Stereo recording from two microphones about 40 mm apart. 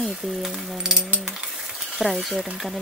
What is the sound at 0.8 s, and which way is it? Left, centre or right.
Coin, centre.